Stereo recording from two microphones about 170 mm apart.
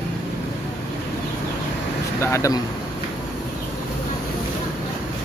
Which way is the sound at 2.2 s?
15° left (ahead or behind).